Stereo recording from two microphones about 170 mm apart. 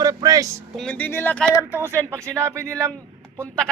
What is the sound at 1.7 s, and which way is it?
Speech, 15° right (ahead or behind).